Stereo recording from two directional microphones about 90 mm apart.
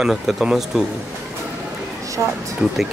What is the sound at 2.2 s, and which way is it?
Speech, 30° right (ahead or behind).